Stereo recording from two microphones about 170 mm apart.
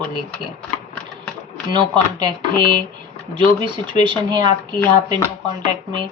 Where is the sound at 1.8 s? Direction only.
25° right (ahead or behind).